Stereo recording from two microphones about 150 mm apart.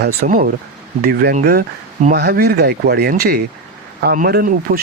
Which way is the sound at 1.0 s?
90° right.